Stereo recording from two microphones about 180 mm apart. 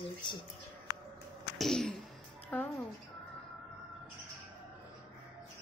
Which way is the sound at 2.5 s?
10° left (ahead or behind).